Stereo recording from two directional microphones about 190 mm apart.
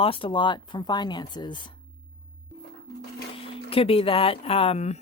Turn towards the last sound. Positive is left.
turn(degrees=35)  # may be behind; listen again after turning